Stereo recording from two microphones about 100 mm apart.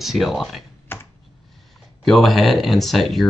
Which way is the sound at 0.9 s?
20° left (ahead or behind).